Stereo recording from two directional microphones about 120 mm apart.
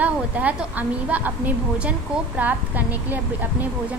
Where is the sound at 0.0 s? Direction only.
15° right (ahead or behind).